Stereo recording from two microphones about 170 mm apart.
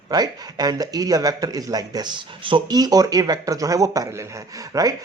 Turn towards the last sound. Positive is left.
turn(degrees=-20)  # may be behind; listen again after turning